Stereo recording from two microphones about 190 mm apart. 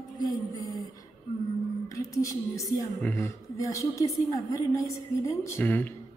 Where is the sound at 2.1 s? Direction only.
15° left (ahead or behind).